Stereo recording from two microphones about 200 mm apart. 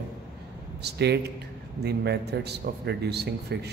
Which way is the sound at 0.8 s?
55° right (ahead or behind).